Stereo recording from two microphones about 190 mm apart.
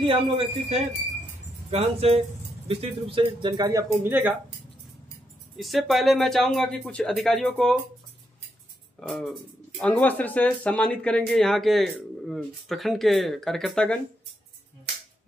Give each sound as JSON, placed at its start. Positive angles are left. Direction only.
{"t": 0.0, "sound": "speech", "side_deg": -30}
{"t": 5.6, "sound": "speech", "side_deg": 0}
{"t": 9.0, "sound": "speech", "side_deg": 0}